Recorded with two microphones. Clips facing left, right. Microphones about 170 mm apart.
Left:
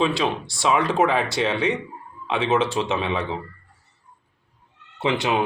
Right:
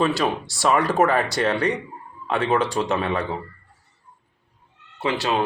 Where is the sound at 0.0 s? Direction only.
Centre (ahead or behind).